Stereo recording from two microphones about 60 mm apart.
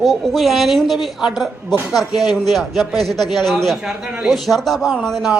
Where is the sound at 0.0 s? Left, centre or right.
Centre.